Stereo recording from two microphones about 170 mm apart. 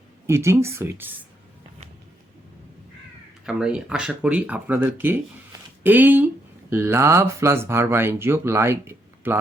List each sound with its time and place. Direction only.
0.3 s speech: 15° right (ahead or behind)
3.4 s speech: 5° right (ahead or behind)